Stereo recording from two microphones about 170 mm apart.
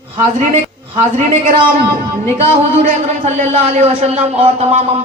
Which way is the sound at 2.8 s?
45° right (ahead or behind).